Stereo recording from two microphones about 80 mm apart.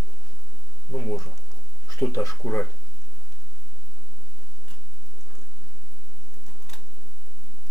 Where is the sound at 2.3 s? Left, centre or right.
Centre.